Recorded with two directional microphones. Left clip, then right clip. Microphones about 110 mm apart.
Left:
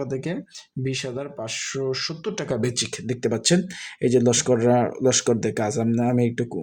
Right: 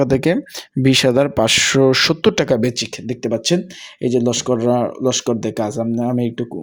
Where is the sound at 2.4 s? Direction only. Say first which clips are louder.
Right 10 dB; 60° right (ahead or behind).